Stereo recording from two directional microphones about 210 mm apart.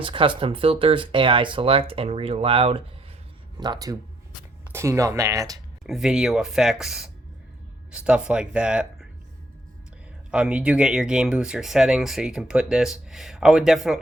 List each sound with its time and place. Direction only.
0.0 s speech: 25° right (ahead or behind)
5.8 s speech: centre (ahead or behind)
10.3 s speech: 5° right (ahead or behind)